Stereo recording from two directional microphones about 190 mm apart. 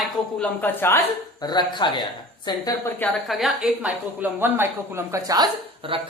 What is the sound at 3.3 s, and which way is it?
Speech, centre (ahead or behind).